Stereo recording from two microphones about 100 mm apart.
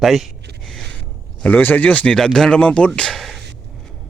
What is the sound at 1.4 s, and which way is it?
Speech, 15° left (ahead or behind).